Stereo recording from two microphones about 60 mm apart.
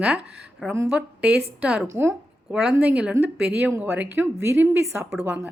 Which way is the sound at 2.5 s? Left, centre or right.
Centre.